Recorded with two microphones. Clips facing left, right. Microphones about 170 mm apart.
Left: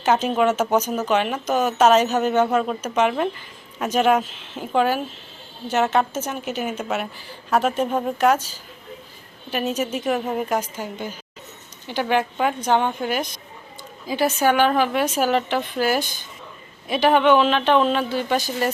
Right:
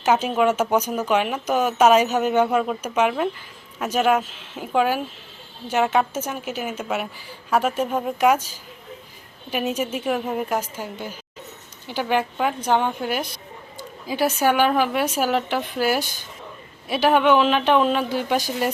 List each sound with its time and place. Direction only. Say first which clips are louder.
0.0 s speech: even; 10° right (ahead or behind)